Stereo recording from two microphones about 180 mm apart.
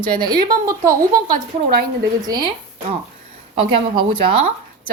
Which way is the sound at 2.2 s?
20° right (ahead or behind).